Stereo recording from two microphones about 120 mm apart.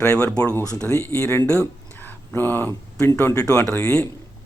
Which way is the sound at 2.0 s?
15° left (ahead or behind).